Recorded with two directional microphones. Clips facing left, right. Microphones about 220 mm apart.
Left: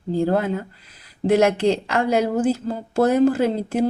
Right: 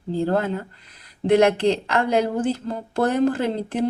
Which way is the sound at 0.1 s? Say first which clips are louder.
Left 2 dB; 10° left (ahead or behind).